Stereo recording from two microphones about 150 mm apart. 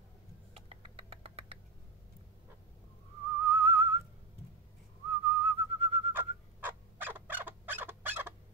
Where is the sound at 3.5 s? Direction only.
40° right (ahead or behind).